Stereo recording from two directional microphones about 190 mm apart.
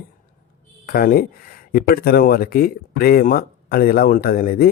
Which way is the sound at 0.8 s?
50° left (ahead or behind).